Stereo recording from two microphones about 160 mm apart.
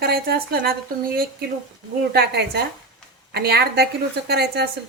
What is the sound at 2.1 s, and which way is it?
A woman's voice, 85° right.